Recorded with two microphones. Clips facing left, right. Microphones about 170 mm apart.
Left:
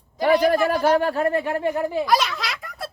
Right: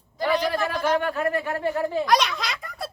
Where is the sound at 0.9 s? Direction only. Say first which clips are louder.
Left 4 dB; 35° left (ahead or behind).